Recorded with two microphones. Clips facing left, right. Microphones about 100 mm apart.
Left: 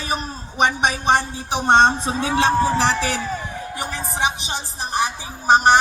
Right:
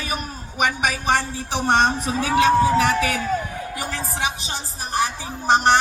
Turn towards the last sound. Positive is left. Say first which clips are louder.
# left 2 dB
turn(degrees=15)  # may be behind; listen again after turning